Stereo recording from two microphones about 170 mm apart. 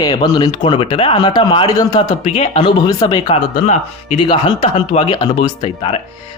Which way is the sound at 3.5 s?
45° left (ahead or behind).